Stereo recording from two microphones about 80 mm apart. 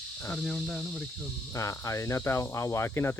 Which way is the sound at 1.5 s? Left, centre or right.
Left.